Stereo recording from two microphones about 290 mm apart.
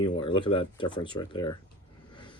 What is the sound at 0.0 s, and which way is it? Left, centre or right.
Speech, centre.